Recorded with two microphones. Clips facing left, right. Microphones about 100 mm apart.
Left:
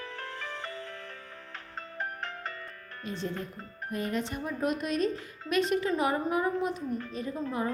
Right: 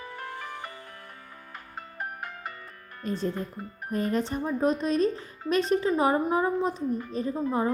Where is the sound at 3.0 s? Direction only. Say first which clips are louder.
Right 6 dB; 40° right (ahead or behind).